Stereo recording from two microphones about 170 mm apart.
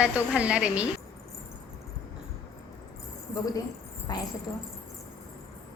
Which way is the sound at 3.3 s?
20° left (ahead or behind).